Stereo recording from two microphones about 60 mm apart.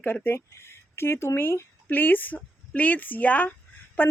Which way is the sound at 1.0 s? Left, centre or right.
Left.